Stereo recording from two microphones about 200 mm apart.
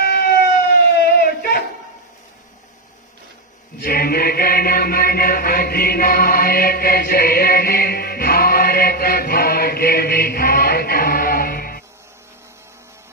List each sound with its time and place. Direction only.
0.0 s siren: 50° left (ahead or behind)
1.0 s a sound: 50° left (ahead or behind)
3.7 s chant: 50° left (ahead or behind)